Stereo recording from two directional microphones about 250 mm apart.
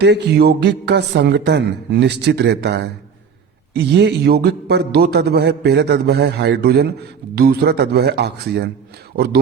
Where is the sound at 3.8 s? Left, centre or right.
Right.